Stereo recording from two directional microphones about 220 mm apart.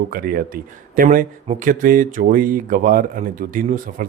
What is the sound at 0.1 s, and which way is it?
Speech, 40° right (ahead or behind).